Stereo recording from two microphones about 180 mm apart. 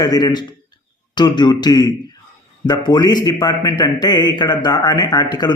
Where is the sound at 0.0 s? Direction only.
20° left (ahead or behind).